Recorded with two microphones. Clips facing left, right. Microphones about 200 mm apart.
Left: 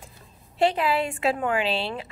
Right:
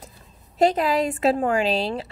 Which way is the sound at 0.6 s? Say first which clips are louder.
Right 3 dB; 40° right (ahead or behind).